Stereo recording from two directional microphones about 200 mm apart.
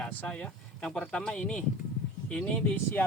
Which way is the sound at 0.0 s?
5° left (ahead or behind).